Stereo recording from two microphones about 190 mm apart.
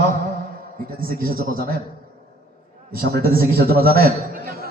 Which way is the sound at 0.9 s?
50° right (ahead or behind).